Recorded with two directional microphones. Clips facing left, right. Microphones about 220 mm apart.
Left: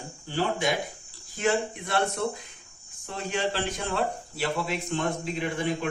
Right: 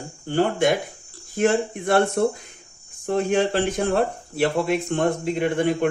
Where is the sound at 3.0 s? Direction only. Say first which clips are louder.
Right 9 dB; 55° right (ahead or behind).